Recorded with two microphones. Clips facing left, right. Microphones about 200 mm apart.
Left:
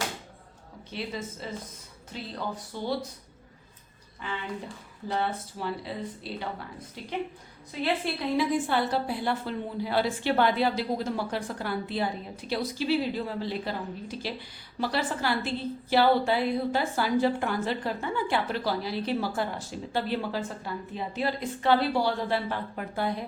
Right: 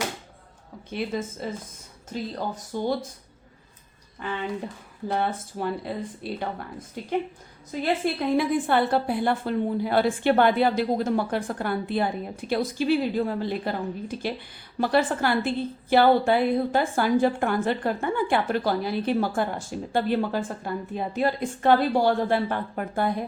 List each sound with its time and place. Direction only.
0.9 s a woman's voice: 50° right (ahead or behind)
4.2 s a woman's voice: 50° right (ahead or behind)
8.4 s a woman's voice: 55° right (ahead or behind)